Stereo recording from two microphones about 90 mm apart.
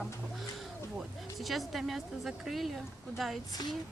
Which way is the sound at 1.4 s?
Centre (ahead or behind).